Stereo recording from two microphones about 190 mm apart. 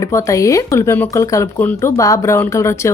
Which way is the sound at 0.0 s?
15° left (ahead or behind).